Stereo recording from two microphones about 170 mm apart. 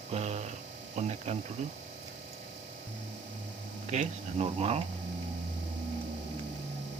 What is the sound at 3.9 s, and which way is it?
Speech, 40° right (ahead or behind).